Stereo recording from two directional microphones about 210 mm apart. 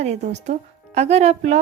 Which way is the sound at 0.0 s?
30° right (ahead or behind).